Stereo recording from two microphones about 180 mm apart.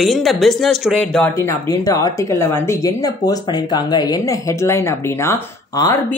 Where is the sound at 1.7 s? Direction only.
15° left (ahead or behind).